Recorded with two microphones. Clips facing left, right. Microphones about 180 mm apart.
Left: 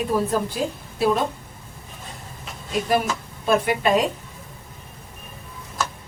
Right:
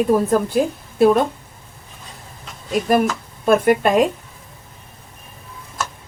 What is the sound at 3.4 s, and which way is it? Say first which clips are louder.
Speech: right 6 dB; 50° right (ahead or behind).